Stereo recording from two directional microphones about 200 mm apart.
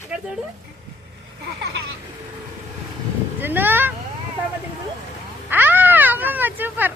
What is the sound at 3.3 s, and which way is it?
Speech, 10° right (ahead or behind).